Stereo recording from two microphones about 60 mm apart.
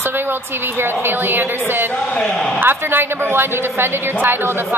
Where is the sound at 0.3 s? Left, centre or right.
Right.